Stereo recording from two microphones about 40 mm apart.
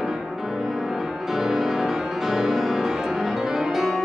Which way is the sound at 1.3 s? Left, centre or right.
Centre.